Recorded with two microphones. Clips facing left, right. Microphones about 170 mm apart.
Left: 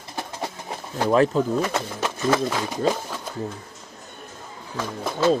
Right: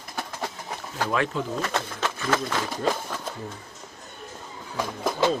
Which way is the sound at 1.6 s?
15° left (ahead or behind).